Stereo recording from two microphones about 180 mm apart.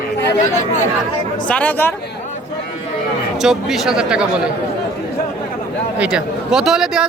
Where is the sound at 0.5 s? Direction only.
45° left (ahead or behind).